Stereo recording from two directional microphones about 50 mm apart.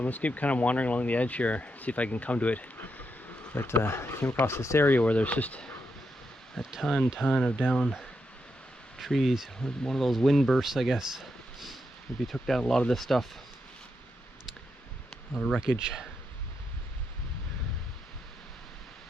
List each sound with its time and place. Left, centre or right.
0.0 s speech: left
3.5 s speech: left
4.8 s speech: left
6.6 s speech: centre
7.2 s speech: centre
9.0 s speech: centre
9.6 s speech: centre
15.1 s a sound: centre
15.8 s speech: centre